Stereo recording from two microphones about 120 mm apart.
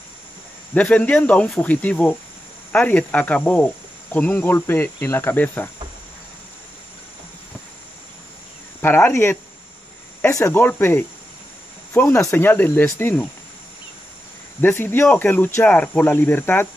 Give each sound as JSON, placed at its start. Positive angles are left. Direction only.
{"t": 0.7, "sound": "cricket", "side_deg": 10}
{"t": 8.8, "sound": "cricket", "side_deg": 15}
{"t": 11.9, "sound": "speech", "side_deg": 15}
{"t": 12.2, "sound": "cricket", "side_deg": 20}
{"t": 14.6, "sound": "cricket", "side_deg": 15}